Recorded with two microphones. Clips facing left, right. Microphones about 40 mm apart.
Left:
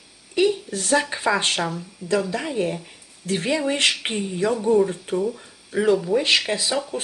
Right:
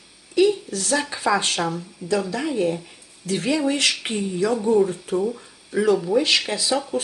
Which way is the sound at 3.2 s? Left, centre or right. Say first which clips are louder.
Right 1 dB; left.